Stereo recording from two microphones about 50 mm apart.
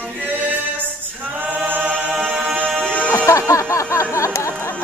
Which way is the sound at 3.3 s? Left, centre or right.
Left.